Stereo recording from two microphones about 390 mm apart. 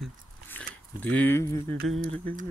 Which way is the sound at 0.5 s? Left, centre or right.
Centre.